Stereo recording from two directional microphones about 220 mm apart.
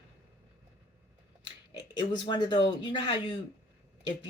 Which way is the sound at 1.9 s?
20° left (ahead or behind).